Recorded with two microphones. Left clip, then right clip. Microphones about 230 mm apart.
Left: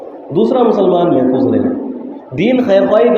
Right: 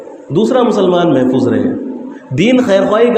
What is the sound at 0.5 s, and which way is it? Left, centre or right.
A man's voice, right.